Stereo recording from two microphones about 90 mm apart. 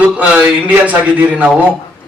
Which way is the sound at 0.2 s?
15° right (ahead or behind).